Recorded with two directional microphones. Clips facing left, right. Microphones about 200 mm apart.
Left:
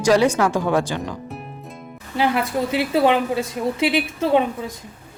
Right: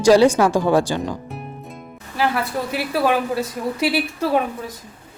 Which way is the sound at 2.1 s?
20° left (ahead or behind).